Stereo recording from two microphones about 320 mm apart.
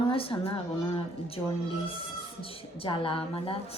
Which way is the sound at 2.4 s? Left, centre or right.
Centre.